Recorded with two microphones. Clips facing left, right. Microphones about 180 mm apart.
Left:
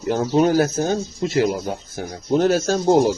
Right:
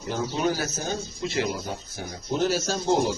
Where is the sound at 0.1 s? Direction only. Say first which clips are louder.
Left 9 dB; 50° left (ahead or behind).